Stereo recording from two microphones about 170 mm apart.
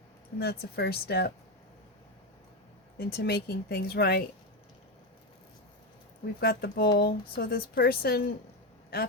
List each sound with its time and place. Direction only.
0.3 s speech: 70° left (ahead or behind)
3.0 s speech: 70° left (ahead or behind)
6.4 s speech: 65° left (ahead or behind)